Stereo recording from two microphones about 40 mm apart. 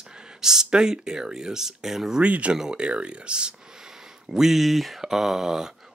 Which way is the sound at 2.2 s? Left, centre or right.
Right.